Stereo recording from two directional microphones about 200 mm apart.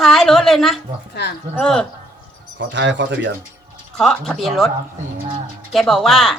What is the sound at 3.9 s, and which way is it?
Speech, centre (ahead or behind).